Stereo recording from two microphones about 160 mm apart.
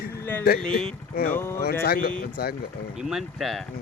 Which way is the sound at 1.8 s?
70° left (ahead or behind).